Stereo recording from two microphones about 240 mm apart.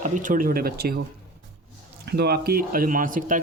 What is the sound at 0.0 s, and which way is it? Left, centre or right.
Speech, right.